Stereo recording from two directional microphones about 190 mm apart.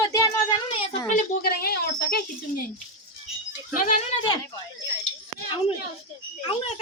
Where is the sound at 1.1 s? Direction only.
50° left (ahead or behind).